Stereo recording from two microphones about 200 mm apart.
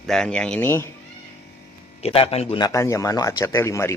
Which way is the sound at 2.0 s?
30° left (ahead or behind).